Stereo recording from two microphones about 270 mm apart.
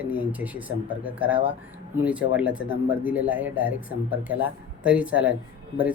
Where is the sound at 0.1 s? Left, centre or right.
Centre.